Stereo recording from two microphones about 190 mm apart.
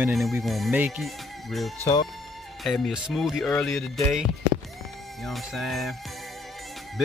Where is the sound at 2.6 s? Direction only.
Centre (ahead or behind).